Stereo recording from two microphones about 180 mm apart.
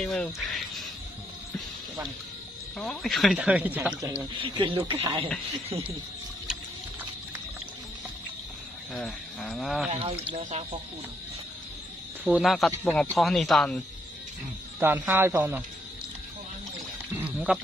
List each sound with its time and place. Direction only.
0.0 s speech: 5° left (ahead or behind)
2.8 s speech: centre (ahead or behind)
4.1 s speech: 30° right (ahead or behind)
8.9 s speech: centre (ahead or behind)
9.8 s speech: 35° right (ahead or behind)
12.3 s speech: centre (ahead or behind)
14.8 s speech: 10° right (ahead or behind)
17.1 s a sound: 5° right (ahead or behind)